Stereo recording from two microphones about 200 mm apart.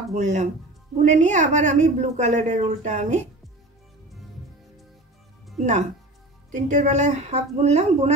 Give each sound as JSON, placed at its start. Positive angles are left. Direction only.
{"t": 0.1, "sound": "a woman's voice", "side_deg": -35}
{"t": 5.6, "sound": "a woman's voice", "side_deg": -35}